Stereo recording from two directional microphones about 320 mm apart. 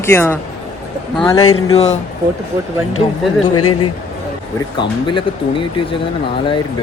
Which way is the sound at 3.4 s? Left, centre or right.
Left.